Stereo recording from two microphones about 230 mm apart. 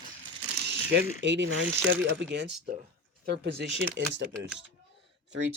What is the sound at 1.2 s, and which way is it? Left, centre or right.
Speech, right.